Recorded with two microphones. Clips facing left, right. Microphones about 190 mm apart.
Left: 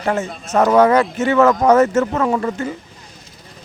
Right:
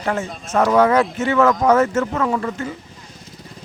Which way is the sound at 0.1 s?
40° left (ahead or behind).